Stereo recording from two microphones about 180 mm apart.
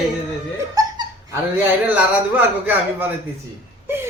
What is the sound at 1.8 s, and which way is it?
A woman's voice, 10° right (ahead or behind).